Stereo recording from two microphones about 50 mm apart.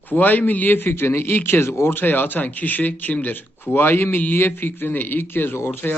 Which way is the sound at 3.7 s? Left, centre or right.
Left.